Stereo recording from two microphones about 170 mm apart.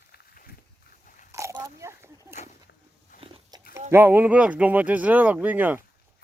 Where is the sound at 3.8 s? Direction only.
15° right (ahead or behind).